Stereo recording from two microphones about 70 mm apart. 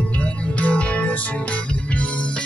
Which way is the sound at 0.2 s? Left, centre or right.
Centre.